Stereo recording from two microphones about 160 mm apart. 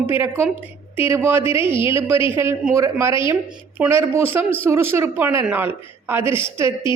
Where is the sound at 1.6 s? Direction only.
30° left (ahead or behind).